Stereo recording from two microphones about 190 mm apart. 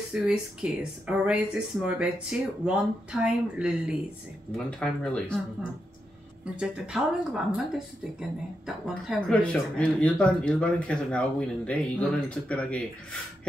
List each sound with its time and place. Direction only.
0.1 s speech: 5° right (ahead or behind)
6.5 s speech: 5° right (ahead or behind)